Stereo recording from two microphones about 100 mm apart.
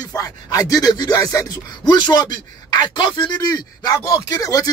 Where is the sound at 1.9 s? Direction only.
45° left (ahead or behind).